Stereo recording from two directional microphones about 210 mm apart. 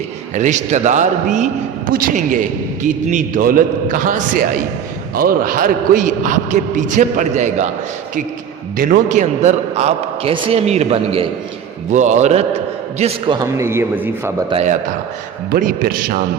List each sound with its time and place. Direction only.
0.3 s a man's voice: 35° right (ahead or behind)
8.8 s a man's voice: 40° right (ahead or behind); by 14.4 s 10° right (ahead or behind)
14.5 s a man's voice: 35° right (ahead or behind)
15.4 s a man's voice: 45° right (ahead or behind)